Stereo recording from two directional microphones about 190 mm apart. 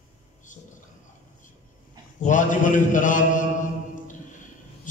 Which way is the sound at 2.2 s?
40° left (ahead or behind).